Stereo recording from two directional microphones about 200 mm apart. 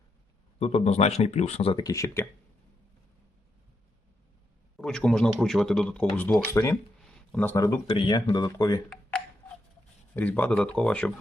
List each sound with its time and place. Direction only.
0.6 s speech: 30° left (ahead or behind); by 2.2 s 15° left (ahead or behind)
4.8 s speech: 5° left (ahead or behind)
10.2 s speech: 10° left (ahead or behind)